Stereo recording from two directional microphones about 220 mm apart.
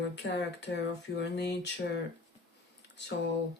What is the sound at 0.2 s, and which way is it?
Speech, 50° left (ahead or behind).